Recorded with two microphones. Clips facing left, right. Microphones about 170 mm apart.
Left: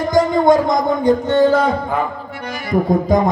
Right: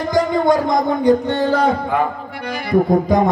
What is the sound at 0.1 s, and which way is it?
Speech, 45° left (ahead or behind).